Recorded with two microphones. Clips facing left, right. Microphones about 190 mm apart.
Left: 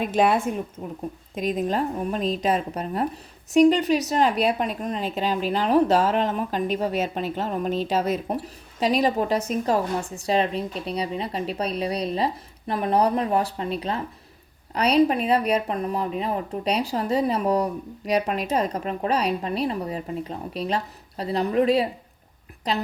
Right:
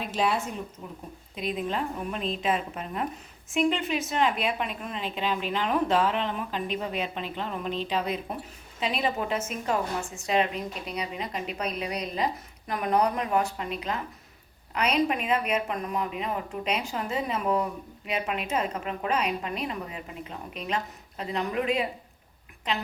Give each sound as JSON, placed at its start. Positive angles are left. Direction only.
{"t": 0.0, "sound": "a woman's voice", "side_deg": 55}